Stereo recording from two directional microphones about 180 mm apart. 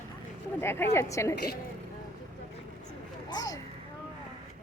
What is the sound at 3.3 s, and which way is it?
Speech, 20° left (ahead or behind).